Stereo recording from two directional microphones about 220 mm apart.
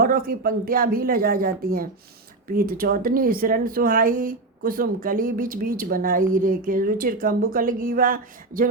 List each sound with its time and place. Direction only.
0.0 s a woman's voice: 40° right (ahead or behind)